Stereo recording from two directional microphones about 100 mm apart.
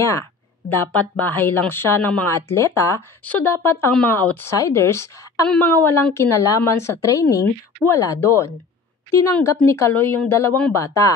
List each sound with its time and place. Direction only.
0.7 s speech: 20° left (ahead or behind)
3.3 s speech: 20° left (ahead or behind)
5.5 s speech: 15° left (ahead or behind)
6.1 s speech: 35° left (ahead or behind)
9.9 s speech: 15° left (ahead or behind)
10.7 s speech: 30° left (ahead or behind)